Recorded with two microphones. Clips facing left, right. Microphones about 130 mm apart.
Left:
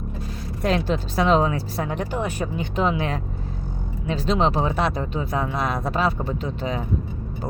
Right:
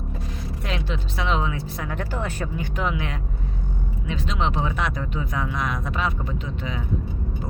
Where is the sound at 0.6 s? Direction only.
40° left (ahead or behind).